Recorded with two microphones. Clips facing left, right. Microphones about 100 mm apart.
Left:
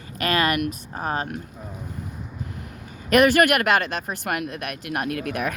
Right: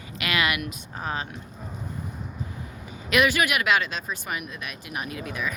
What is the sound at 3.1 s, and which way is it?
Speech, 50° left (ahead or behind).